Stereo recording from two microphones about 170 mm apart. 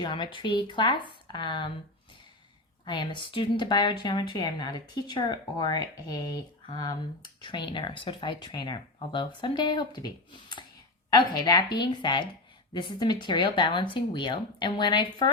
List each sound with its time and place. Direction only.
0.0 s speech: 25° left (ahead or behind)
2.8 s speech: 25° left (ahead or behind)